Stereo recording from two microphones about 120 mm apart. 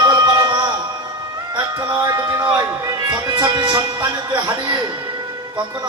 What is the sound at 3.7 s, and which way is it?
Music, 30° right (ahead or behind).